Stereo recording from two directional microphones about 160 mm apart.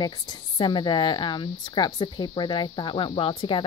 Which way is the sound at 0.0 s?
25° left (ahead or behind).